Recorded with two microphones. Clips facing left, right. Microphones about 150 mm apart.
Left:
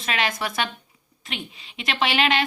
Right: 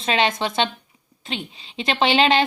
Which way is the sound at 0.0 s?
30° right (ahead or behind).